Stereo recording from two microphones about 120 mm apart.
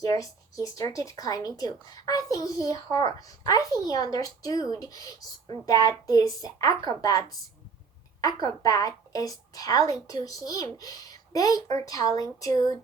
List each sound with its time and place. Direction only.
0.0 s a woman's voice: 30° left (ahead or behind)